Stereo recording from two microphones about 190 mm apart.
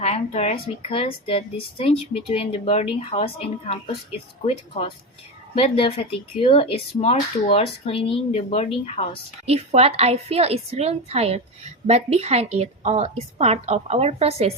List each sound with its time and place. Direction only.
0.0 s a woman's voice: 35° left (ahead or behind)
9.5 s a woman's voice: 30° right (ahead or behind)